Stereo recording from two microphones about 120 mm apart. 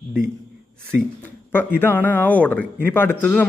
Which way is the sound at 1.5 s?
20° left (ahead or behind).